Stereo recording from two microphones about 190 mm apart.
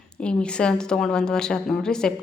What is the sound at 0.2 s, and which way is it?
A woman's voice, 5° left (ahead or behind).